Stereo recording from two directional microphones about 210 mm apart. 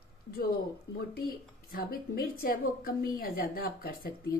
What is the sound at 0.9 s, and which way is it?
Speech, 45° left (ahead or behind).